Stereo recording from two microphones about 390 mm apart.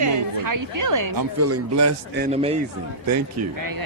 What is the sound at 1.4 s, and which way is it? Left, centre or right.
Speech, right.